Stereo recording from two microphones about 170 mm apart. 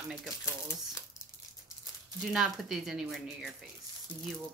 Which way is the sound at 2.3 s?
Centre (ahead or behind).